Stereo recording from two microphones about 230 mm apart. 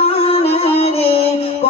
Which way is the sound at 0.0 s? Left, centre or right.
Left.